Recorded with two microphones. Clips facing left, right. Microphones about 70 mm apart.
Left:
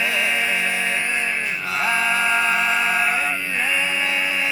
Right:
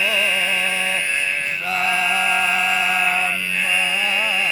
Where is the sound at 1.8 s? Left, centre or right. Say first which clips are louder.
Left 1 dB; left.